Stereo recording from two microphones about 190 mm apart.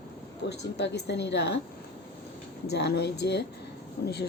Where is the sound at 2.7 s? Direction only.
60° left (ahead or behind).